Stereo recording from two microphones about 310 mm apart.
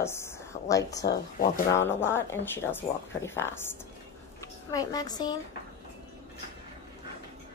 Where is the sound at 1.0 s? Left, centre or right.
Left.